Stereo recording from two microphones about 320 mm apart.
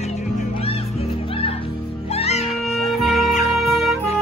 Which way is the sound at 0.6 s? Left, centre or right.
Centre.